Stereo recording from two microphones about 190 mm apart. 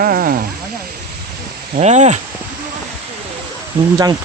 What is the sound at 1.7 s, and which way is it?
Speech, 35° right (ahead or behind).